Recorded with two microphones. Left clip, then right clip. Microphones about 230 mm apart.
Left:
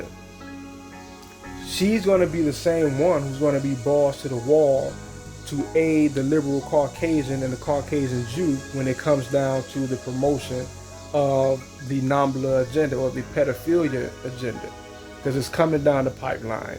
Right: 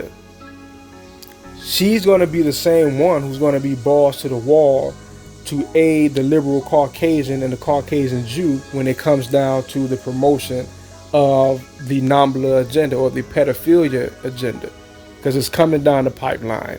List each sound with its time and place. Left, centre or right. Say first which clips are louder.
1.6 s speech: right 7 dB; right